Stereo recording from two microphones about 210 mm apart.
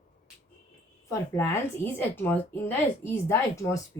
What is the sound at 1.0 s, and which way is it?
A woman's voice, 10° left (ahead or behind).